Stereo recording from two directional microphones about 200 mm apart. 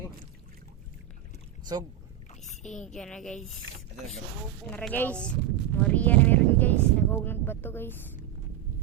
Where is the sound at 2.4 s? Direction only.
40° left (ahead or behind).